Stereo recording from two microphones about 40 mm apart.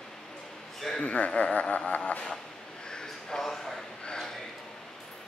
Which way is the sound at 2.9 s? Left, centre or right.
Centre.